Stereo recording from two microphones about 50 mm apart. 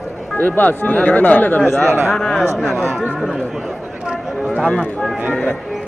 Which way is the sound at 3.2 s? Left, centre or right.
Centre.